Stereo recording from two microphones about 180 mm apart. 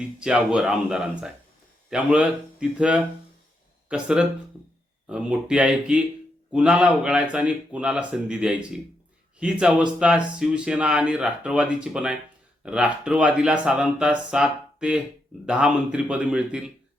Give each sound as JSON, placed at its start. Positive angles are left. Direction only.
{"t": 0.2, "sound": "a man's voice", "side_deg": -5}